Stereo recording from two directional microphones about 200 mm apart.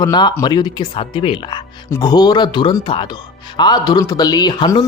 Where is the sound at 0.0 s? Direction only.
20° left (ahead or behind).